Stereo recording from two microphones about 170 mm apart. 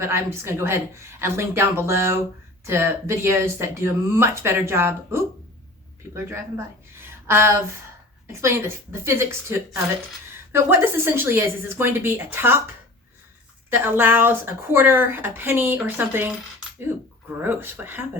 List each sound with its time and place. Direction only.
0.0 s a woman's voice: 15° right (ahead or behind)
7.3 s a woman's voice: 15° right (ahead or behind)
13.7 s a woman's voice: 10° right (ahead or behind)